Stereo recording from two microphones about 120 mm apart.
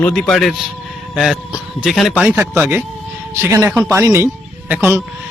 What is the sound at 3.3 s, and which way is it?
A man's voice, 20° right (ahead or behind).